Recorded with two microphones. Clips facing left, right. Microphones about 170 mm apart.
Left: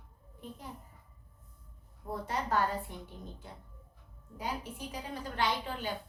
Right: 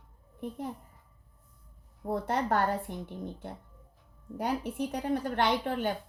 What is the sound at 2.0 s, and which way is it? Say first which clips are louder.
Speech: right 6 dB; 60° right (ahead or behind).